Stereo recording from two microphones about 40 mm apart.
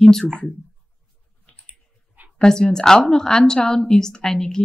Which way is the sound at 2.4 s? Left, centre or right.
Centre.